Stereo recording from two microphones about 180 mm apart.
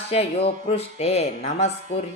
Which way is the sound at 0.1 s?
35° left (ahead or behind).